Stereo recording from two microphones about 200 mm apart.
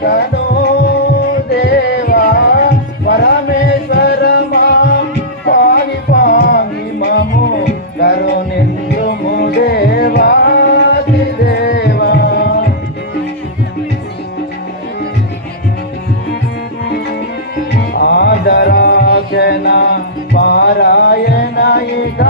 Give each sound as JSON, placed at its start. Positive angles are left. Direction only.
{"t": 0.0, "sound": "music", "side_deg": 50}
{"t": 17.9, "sound": "mantra", "side_deg": 50}
{"t": 20.3, "sound": "music", "side_deg": 55}